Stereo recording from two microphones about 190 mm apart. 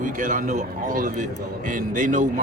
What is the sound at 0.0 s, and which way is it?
A man's voice, 45° right (ahead or behind).